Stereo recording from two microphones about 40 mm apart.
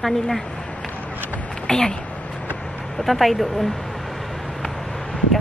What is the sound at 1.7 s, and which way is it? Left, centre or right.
Speech, centre.